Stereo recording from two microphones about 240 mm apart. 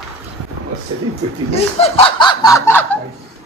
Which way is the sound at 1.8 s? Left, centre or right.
Left.